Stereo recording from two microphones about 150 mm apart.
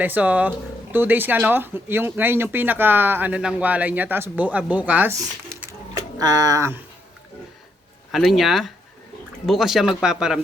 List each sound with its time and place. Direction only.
0.0 s speech: 10° right (ahead or behind)
5.1 s a sound: 20° right (ahead or behind)
6.1 s speech: 25° right (ahead or behind)
8.1 s speech: centre (ahead or behind)